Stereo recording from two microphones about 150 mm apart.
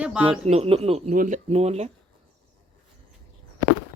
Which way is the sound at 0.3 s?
40° right (ahead or behind).